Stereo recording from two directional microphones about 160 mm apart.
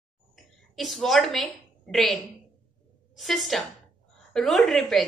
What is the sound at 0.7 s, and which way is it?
A woman's voice, centre (ahead or behind).